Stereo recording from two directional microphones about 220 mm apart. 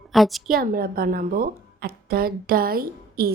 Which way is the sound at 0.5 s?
40° right (ahead or behind).